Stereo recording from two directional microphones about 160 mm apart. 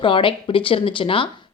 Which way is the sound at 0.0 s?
30° left (ahead or behind).